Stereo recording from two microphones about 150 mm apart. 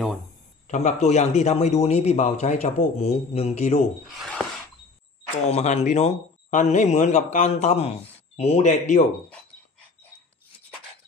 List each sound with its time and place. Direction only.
0.7 s a man's voice: 50° left (ahead or behind)
4.1 s a sound: centre (ahead or behind)
5.5 s a man's voice: 45° left (ahead or behind)